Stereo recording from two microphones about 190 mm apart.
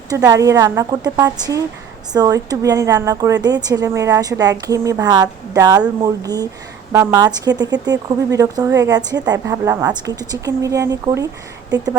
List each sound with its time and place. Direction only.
0.1 s a woman's voice: 15° right (ahead or behind)